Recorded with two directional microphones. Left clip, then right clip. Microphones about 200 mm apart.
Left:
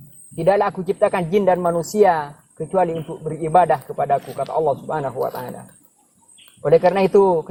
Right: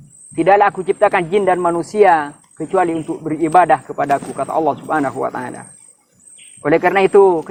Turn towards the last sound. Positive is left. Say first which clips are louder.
# right 4 dB
turn(degrees=-30)  # may be behind; listen again after turning